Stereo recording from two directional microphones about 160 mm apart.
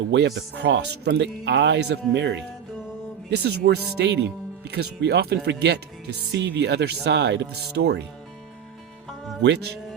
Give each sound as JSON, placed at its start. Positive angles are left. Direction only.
{"t": 0.1, "sound": "speech", "side_deg": -90}
{"t": 9.4, "sound": "speech", "side_deg": -90}